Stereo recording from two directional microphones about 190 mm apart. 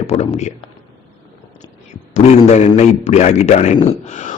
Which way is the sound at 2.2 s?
35° left (ahead or behind).